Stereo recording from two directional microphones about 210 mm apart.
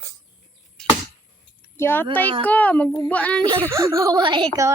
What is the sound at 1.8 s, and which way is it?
A child's voice, 10° left (ahead or behind).